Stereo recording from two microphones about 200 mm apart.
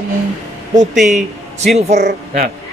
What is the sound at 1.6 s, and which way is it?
Speech, 35° right (ahead or behind).